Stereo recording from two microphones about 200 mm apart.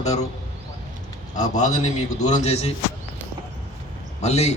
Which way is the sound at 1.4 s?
35° left (ahead or behind).